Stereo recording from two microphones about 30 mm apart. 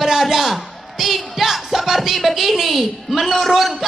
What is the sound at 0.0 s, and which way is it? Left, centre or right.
Speech, centre.